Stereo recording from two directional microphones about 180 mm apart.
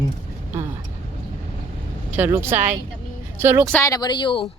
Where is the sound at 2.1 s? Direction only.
10° right (ahead or behind).